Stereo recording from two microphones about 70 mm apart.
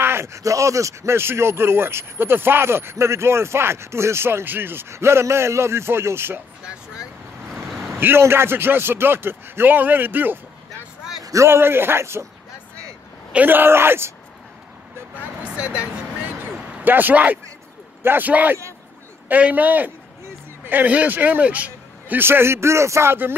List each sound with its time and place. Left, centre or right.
0.0 s speech: right
6.6 s vehicle: centre
8.0 s speech: right
11.4 s speech: right
13.3 s speech: right
15.1 s a sound: centre
18.0 s a man's voice: right
22.2 s speech: right